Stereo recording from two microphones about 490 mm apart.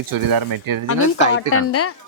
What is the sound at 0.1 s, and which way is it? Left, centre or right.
Speech, right.